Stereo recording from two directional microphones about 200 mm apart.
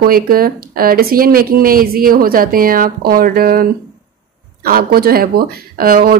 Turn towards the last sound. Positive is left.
turn(degrees=-45)  # may be behind; listen again after turning